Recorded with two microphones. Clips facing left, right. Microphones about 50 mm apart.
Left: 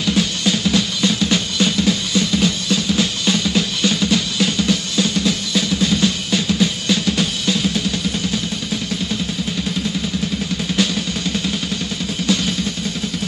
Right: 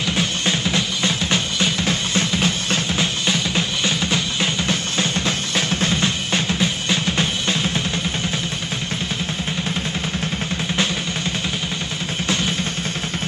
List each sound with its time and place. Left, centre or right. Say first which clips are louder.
0.0 s music: left 3 dB; right